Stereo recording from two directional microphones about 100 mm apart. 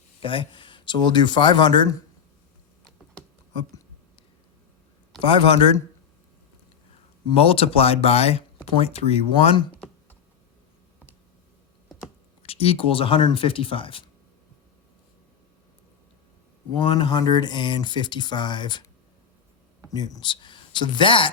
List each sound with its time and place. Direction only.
0.2 s speech: 60° left (ahead or behind)
5.3 s speech: 60° left (ahead or behind)
7.3 s speech: 70° left (ahead or behind); by 9.6 s 90° left
12.4 s speech: 80° left; by 14.0 s 65° left (ahead or behind)
16.7 s speech: 50° left (ahead or behind)
19.9 s speech: 40° left (ahead or behind); by 21.2 s 60° left (ahead or behind)